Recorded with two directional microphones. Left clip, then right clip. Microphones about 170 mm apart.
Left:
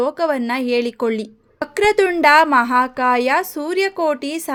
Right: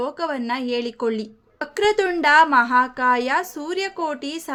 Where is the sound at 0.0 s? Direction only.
35° left (ahead or behind).